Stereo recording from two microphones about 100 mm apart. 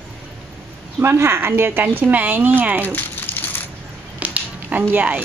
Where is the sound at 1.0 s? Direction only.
25° right (ahead or behind).